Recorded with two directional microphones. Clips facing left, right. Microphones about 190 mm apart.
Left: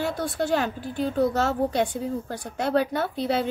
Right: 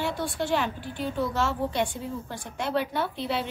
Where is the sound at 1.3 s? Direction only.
40° left (ahead or behind).